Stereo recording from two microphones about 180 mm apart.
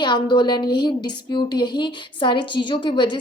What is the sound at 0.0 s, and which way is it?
Speech, 25° left (ahead or behind).